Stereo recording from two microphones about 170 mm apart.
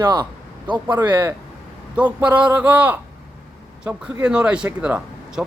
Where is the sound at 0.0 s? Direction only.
25° right (ahead or behind).